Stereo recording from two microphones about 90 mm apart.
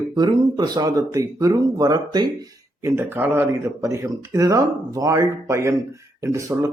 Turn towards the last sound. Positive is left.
turn(degrees=-35)  # may be behind; listen again after turning